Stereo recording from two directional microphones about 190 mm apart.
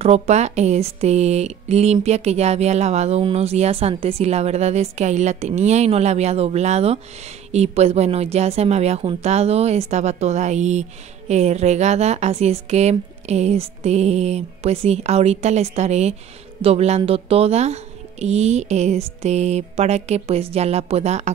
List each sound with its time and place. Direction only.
0.0 s a woman's voice: 35° right (ahead or behind)